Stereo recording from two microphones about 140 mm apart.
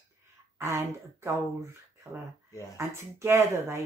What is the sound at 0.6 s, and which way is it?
Speech, 20° right (ahead or behind).